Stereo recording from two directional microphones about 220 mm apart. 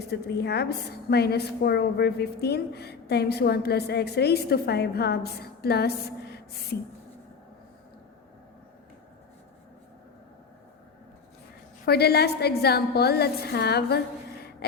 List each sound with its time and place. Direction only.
0.1 s a woman's voice: 50° left (ahead or behind)
11.9 s a woman's voice: 45° left (ahead or behind)
14.6 s a sound: 45° left (ahead or behind)